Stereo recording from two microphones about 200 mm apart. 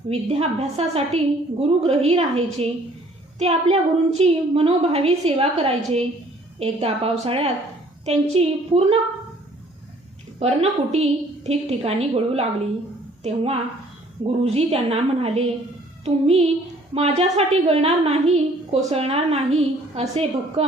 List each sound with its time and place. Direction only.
0.1 s a woman's voice: 30° right (ahead or behind)
10.4 s a woman's voice: 35° right (ahead or behind)